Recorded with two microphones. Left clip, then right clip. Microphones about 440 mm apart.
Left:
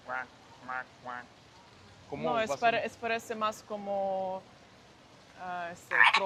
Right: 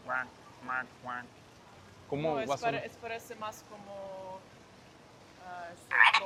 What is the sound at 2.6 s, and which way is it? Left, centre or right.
Speech, left.